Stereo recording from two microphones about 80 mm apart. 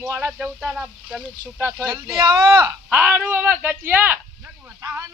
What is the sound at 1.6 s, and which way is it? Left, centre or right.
Speech, right.